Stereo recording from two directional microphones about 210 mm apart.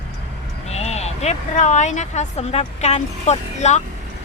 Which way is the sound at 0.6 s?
30° left (ahead or behind).